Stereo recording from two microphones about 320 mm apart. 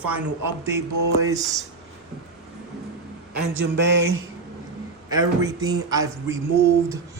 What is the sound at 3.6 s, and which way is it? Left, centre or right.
Mantra, right.